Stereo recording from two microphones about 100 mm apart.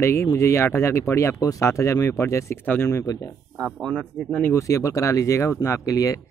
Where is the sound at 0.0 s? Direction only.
25° left (ahead or behind).